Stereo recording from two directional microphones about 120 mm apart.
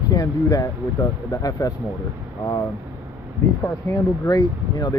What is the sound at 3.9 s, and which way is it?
A man's voice, 30° left (ahead or behind).